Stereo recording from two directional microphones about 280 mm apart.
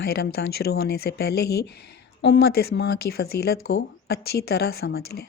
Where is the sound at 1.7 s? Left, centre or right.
Left.